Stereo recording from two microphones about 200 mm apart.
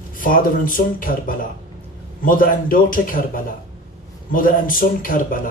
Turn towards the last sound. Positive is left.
turn(degrees=45)  # may be behind; listen again after turning